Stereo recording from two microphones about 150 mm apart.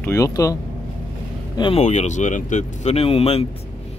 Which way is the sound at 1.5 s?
30° left (ahead or behind).